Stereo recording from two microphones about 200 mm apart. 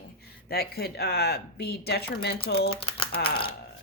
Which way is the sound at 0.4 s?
50° left (ahead or behind).